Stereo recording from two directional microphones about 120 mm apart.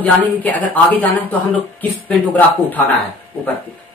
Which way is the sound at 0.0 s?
15° left (ahead or behind).